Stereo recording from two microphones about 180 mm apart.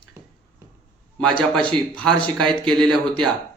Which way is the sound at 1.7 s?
5° left (ahead or behind).